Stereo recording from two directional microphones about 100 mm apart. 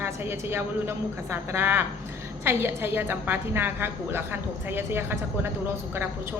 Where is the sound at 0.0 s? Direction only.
25° right (ahead or behind).